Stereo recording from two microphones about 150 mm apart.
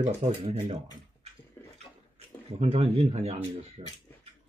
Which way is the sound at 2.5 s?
45° right (ahead or behind).